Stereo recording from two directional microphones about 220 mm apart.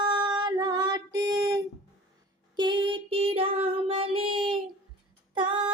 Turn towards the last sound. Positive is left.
turn(degrees=-20)  # may be behind; listen again after turning